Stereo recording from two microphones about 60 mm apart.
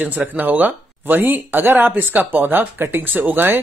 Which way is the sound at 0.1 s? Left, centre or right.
Right.